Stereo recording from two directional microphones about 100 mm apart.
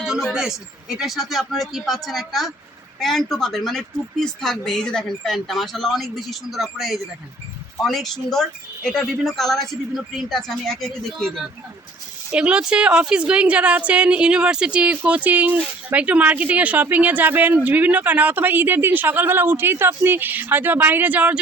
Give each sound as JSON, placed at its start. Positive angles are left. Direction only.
{"t": 0.0, "sound": "a sound", "side_deg": -5}
{"t": 0.9, "sound": "speech", "side_deg": 0}
{"t": 12.3, "sound": "a woman's voice", "side_deg": -10}